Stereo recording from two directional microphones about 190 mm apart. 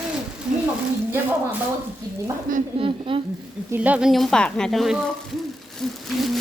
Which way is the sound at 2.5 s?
45° right (ahead or behind).